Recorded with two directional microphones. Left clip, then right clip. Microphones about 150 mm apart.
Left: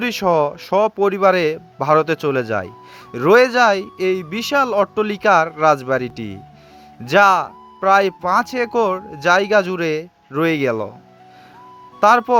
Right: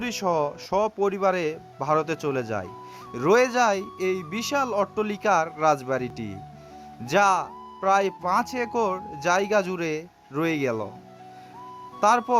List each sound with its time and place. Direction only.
0.0 s speech: 30° left (ahead or behind)
11.9 s speech: 25° left (ahead or behind)